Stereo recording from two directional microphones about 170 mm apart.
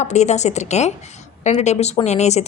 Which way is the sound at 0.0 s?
40° left (ahead or behind).